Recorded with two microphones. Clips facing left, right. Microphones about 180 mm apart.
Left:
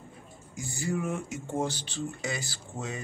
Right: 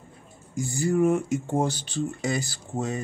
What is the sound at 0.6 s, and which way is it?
Speech, 45° right (ahead or behind).